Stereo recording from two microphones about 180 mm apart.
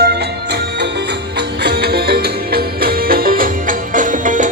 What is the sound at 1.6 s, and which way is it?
Music, 60° right (ahead or behind).